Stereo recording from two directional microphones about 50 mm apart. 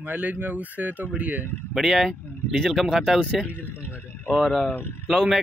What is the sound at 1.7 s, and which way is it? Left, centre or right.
Speech, centre.